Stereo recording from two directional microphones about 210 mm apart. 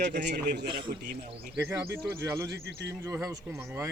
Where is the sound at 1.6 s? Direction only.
10° right (ahead or behind).